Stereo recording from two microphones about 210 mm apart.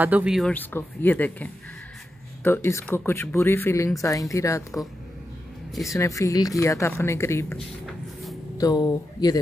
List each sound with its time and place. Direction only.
0.0 s speech: 5° right (ahead or behind); by 4.6 s 15° left (ahead or behind)
5.9 s speech: 15° left (ahead or behind)
7.8 s a sound: centre (ahead or behind)
8.5 s speech: 20° left (ahead or behind)